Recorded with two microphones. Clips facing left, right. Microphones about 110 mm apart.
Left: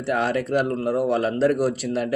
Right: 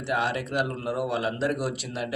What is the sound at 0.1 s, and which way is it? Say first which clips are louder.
A man's voice: left 5 dB; 45° left (ahead or behind).